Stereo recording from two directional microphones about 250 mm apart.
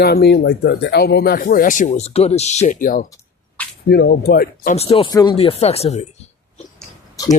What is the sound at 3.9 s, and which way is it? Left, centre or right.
Speech, left.